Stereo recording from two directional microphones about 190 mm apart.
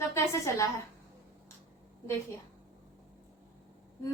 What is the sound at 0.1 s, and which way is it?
Speech, 15° left (ahead or behind).